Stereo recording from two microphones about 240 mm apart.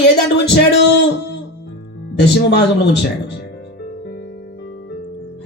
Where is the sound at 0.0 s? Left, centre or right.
Left.